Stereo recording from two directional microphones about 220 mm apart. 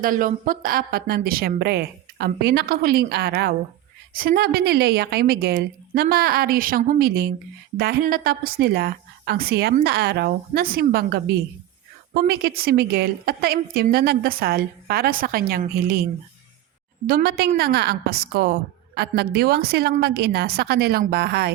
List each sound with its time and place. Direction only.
0.0 s a woman's voice: 40° right (ahead or behind)
17.1 s a woman's voice: 40° right (ahead or behind)